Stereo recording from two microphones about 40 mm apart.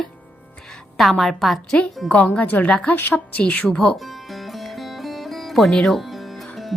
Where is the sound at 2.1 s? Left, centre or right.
Left.